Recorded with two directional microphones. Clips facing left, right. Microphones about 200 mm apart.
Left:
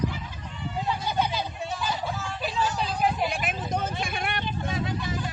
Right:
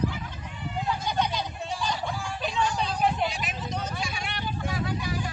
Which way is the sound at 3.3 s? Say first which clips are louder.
Left 4 dB; 55° left (ahead or behind).